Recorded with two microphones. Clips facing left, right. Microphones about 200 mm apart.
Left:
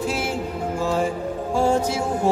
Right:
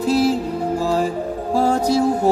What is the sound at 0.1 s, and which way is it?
Music, 35° right (ahead or behind).